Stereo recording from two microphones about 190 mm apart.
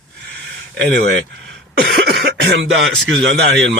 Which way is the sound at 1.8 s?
55° right (ahead or behind).